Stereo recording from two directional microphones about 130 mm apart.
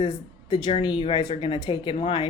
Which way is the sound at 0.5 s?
35° left (ahead or behind).